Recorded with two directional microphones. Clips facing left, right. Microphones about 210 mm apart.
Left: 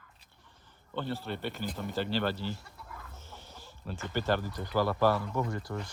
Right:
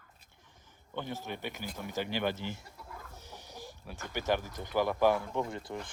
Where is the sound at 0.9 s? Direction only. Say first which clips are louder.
Left 3 dB; 15° right (ahead or behind).